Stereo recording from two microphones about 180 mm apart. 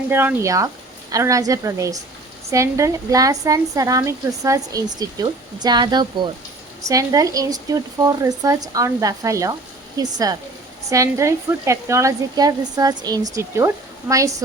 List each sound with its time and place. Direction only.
0.1 s speech: 10° right (ahead or behind)